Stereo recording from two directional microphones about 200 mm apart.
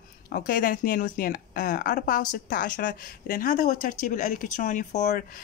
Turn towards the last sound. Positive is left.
turn(degrees=45)  # may be behind; listen again after turning